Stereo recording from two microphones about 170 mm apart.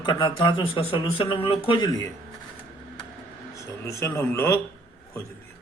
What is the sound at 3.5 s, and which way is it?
A man's voice, 20° left (ahead or behind).